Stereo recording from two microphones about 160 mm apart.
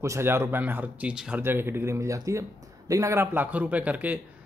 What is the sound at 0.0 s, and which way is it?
Speech, 15° right (ahead or behind).